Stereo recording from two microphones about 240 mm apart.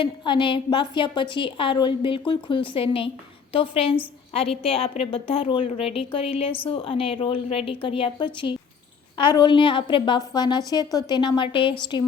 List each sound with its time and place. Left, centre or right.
0.0 s a woman's voice: left